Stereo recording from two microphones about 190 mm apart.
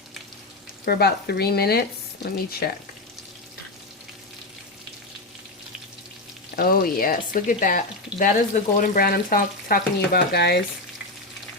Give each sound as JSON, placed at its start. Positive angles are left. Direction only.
{"t": 0.9, "sound": "speech", "side_deg": 55}
{"t": 6.6, "sound": "speech", "side_deg": 50}